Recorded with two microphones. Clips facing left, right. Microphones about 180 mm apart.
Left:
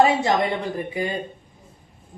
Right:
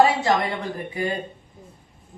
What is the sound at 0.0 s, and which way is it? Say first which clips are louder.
Speech: even; 20° left (ahead or behind).